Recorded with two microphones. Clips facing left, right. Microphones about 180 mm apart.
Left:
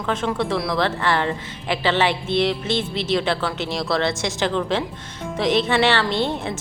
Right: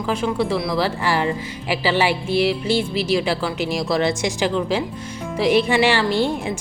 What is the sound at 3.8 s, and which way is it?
Speech, 15° right (ahead or behind).